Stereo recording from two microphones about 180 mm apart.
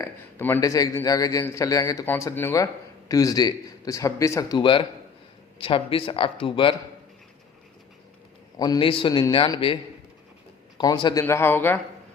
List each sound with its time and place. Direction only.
0.0 s a man's voice: 15° left (ahead or behind); by 6.7 s 30° left (ahead or behind)
8.5 s a man's voice: 20° left (ahead or behind)
10.8 s a man's voice: 25° left (ahead or behind)